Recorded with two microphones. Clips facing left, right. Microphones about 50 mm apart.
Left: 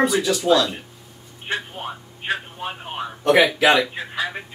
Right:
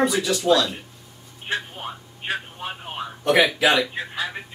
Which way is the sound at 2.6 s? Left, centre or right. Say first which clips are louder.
Left 2 dB; centre.